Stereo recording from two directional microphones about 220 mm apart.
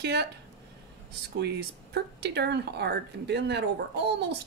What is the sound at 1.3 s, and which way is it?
Speech, 50° right (ahead or behind).